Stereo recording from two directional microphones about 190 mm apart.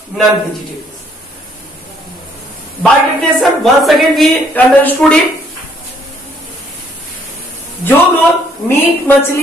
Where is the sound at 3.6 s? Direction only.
Centre (ahead or behind).